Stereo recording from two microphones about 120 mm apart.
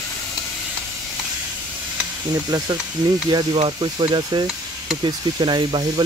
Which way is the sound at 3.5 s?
45° right (ahead or behind).